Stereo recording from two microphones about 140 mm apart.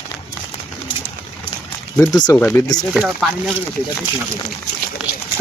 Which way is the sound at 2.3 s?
20° left (ahead or behind).